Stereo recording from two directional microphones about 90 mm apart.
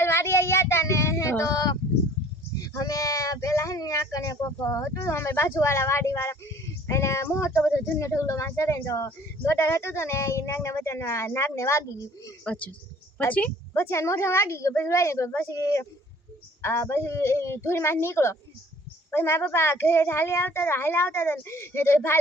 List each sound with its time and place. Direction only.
0.0 s child singing: 30° left (ahead or behind)
2.6 s a sound: 40° left (ahead or behind)
6.8 s speech: 30° left (ahead or behind)
12.5 s a woman's voice: 15° left (ahead or behind)
13.9 s a child's voice: 30° left (ahead or behind)